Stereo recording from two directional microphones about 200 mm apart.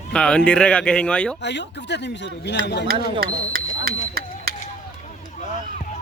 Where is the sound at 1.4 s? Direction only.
60° left (ahead or behind).